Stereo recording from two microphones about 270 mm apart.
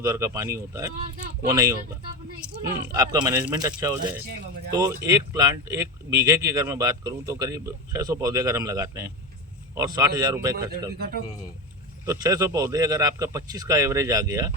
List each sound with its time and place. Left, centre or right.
0.0 s speech: centre
10.9 s speech: right
12.0 s speech: centre